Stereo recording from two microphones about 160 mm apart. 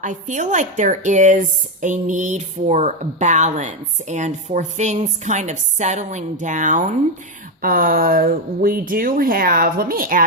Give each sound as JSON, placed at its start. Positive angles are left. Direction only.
{"t": 0.0, "sound": "a woman's voice", "side_deg": -50}